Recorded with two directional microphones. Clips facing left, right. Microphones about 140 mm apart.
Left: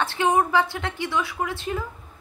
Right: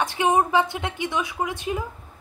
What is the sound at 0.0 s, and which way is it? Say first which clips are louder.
A woman's voice: right 1 dB; 15° right (ahead or behind).